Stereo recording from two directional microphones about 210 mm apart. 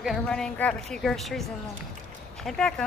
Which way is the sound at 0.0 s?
Centre (ahead or behind).